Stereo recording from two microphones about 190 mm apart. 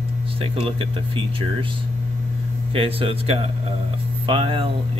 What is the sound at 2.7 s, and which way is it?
Speech, 30° right (ahead or behind).